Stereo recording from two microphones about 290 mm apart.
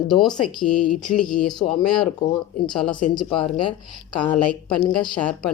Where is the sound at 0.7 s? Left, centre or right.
Left.